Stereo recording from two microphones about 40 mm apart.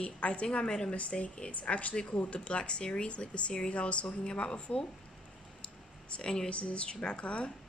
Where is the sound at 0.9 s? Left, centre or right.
Left.